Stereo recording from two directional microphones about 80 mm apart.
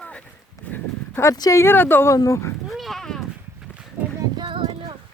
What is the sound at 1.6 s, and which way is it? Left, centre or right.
Speech, left.